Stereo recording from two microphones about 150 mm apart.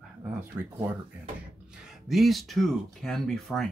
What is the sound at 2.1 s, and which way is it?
Speech, centre (ahead or behind).